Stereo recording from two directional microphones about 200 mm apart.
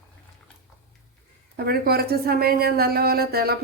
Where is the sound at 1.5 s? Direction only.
50° right (ahead or behind).